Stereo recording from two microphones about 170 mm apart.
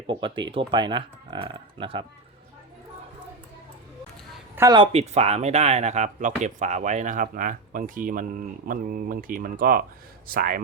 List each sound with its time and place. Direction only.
0.1 s speech: 30° right (ahead or behind)
4.5 s speech: 20° right (ahead or behind)
4.8 s a man's voice: 35° right (ahead or behind); by 10.6 s 55° right (ahead or behind)